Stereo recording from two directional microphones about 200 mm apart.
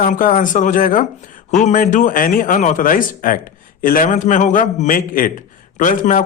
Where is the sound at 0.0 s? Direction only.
45° left (ahead or behind).